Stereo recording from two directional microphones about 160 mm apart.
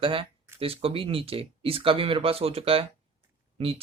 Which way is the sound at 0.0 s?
35° right (ahead or behind).